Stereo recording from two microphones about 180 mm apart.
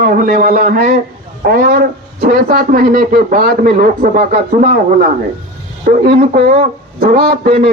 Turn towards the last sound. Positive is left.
turn(degrees=-55)  # may be behind; listen again after turning